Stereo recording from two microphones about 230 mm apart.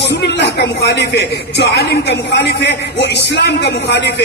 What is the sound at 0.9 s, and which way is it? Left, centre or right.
A man's voice, left.